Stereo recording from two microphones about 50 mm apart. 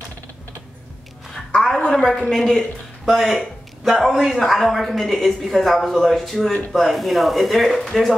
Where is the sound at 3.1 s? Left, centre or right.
Centre.